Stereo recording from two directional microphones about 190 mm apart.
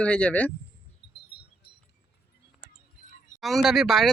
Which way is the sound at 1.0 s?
60° left (ahead or behind).